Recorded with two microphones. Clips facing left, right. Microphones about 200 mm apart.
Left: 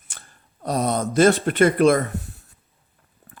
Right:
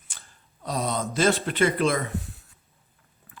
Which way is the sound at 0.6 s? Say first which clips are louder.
Left 6 dB; 45° left (ahead or behind).